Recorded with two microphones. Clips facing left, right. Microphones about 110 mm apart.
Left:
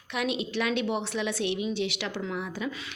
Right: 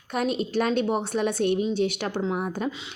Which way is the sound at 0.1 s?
45° right (ahead or behind).